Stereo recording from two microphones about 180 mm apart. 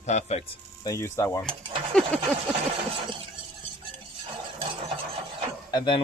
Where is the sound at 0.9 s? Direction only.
15° left (ahead or behind).